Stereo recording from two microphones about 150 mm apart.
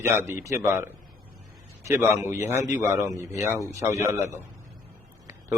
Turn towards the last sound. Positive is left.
turn(degrees=-20)  # may be behind; listen again after turning